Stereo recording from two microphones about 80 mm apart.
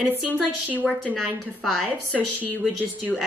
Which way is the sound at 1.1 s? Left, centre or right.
Centre.